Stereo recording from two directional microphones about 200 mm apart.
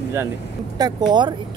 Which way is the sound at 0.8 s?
20° right (ahead or behind).